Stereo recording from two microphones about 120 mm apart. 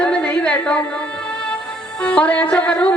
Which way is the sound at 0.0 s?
10° left (ahead or behind).